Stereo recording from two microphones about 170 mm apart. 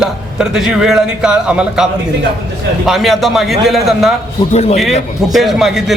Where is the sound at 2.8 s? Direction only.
Centre (ahead or behind).